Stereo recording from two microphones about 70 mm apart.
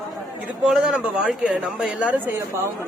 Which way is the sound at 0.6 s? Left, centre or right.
Centre.